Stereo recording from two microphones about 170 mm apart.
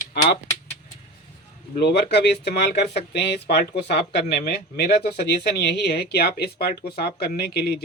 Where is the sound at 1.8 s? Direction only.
70° left (ahead or behind).